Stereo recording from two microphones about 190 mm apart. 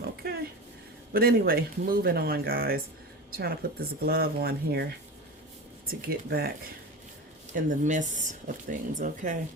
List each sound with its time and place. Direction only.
0.0 s a sound: 55° right (ahead or behind)
1.1 s speech: 50° right (ahead or behind)
5.9 s speech: 50° right (ahead or behind)
7.5 s speech: 40° right (ahead or behind)